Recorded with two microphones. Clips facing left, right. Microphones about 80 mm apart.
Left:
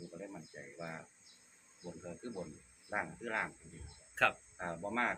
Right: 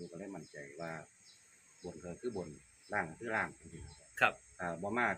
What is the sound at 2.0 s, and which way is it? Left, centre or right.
Speech, centre.